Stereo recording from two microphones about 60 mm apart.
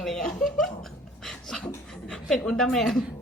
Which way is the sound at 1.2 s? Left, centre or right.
Centre.